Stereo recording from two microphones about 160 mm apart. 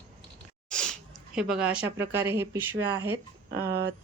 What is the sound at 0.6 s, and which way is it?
Sneeze, 5° left (ahead or behind).